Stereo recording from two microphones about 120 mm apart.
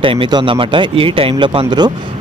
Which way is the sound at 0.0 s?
45° right (ahead or behind).